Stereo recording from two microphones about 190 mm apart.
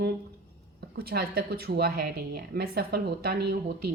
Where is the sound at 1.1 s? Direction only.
55° right (ahead or behind).